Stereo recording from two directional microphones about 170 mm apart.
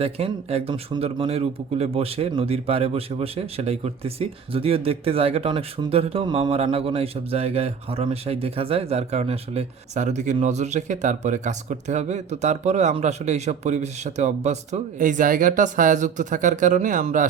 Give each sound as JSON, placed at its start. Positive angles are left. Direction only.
{"t": 0.0, "sound": "speech", "side_deg": -35}